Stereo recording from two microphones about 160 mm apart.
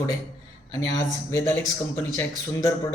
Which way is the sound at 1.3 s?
15° left (ahead or behind).